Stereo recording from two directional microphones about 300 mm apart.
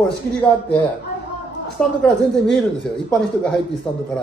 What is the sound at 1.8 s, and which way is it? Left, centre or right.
Speech, centre.